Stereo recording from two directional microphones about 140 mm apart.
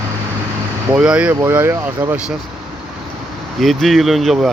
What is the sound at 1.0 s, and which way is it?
Speech, 5° right (ahead or behind).